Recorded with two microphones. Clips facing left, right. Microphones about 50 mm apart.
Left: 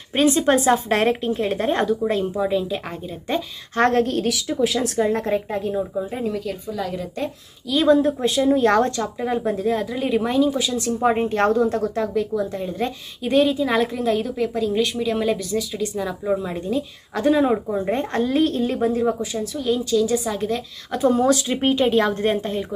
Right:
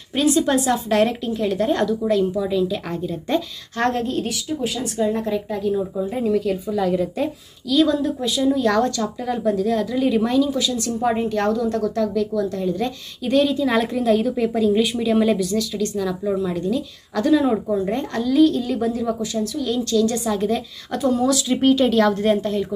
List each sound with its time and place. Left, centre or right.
0.1 s a woman's voice: left
3.7 s a woman's voice: left
4.0 s speech: left
4.7 s a woman's voice: left
6.1 s a woman's voice: centre
7.7 s a woman's voice: left
11.0 s speech: left; by 13.7 s centre
13.7 s a woman's voice: centre
15.5 s a woman's voice: centre
21.0 s a woman's voice: left
21.5 s speech: centre